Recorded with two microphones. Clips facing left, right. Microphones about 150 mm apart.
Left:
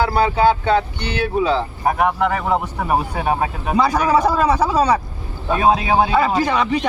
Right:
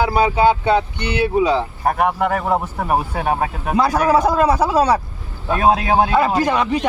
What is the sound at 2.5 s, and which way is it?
A man's voice, centre (ahead or behind).